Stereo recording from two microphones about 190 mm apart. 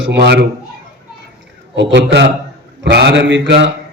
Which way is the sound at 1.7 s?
65° right (ahead or behind).